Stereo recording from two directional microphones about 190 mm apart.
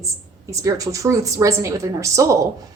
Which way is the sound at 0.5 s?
15° right (ahead or behind).